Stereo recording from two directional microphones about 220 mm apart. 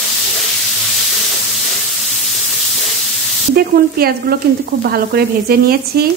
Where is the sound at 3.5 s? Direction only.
45° right (ahead or behind).